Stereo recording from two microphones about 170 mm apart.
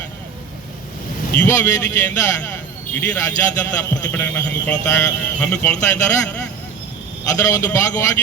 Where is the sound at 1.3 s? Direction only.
15° left (ahead or behind).